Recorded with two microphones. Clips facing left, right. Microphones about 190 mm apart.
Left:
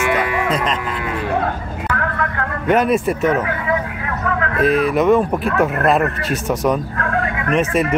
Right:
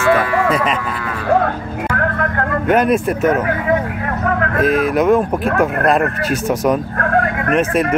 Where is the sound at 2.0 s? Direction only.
50° right (ahead or behind).